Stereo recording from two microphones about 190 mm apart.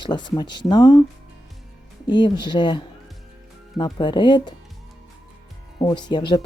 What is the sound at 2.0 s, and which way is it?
Speech, 25° left (ahead or behind).